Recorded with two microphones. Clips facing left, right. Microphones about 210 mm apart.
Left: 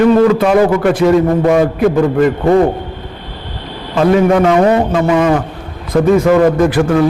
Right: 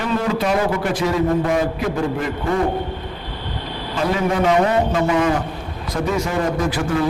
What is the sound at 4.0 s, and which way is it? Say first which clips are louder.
A man's voice: left 10 dB; 60° left (ahead or behind).